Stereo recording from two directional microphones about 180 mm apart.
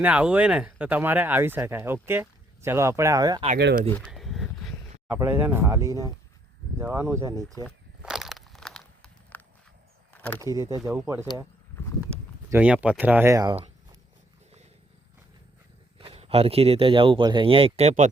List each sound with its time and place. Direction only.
0.0 s speech: 5° right (ahead or behind)
4.1 s a sound: centre (ahead or behind)
5.0 s speech: 10° right (ahead or behind)
8.0 s crushing: centre (ahead or behind)
10.1 s a sound: 10° left (ahead or behind)
10.3 s speech: 20° right (ahead or behind)
12.5 s speech: 5° right (ahead or behind)
16.0 s speech: 35° right (ahead or behind)